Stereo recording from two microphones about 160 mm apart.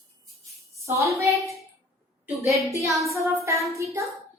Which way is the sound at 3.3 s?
20° right (ahead or behind).